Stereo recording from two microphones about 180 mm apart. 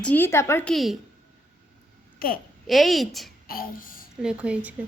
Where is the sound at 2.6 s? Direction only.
Centre (ahead or behind).